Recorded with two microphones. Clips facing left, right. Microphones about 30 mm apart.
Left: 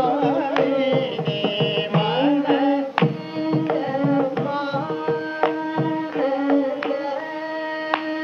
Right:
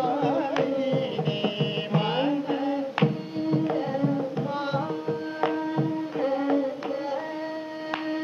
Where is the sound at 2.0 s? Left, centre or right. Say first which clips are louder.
Left 6 dB; centre.